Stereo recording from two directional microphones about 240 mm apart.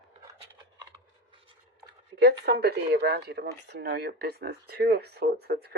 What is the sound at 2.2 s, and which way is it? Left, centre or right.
Speech, right.